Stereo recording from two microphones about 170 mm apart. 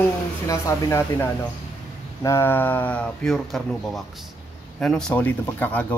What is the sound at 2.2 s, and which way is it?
Speech, 15° left (ahead or behind).